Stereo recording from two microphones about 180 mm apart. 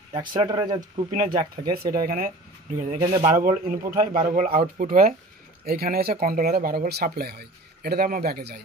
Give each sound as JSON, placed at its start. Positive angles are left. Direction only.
{"t": 0.3, "sound": "speech", "side_deg": -30}
{"t": 0.7, "sound": "speech", "side_deg": -45}
{"t": 3.0, "sound": "speech", "side_deg": -25}
{"t": 3.3, "sound": "speech", "side_deg": -50}